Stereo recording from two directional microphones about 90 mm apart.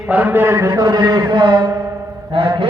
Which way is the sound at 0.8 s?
45° right (ahead or behind).